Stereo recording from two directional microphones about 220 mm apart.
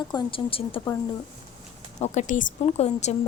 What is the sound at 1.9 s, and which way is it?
A woman's voice, 35° left (ahead or behind).